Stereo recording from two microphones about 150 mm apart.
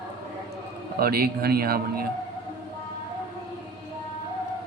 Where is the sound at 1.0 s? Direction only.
90° right.